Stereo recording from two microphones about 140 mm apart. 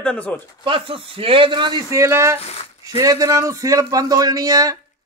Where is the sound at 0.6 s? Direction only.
40° right (ahead or behind).